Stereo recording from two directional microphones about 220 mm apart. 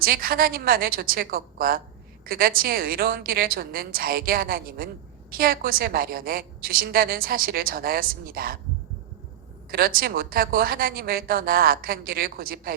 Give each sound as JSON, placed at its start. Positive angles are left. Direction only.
{"t": 0.0, "sound": "a woman's voice", "side_deg": -40}
{"t": 9.7, "sound": "a woman's voice", "side_deg": -45}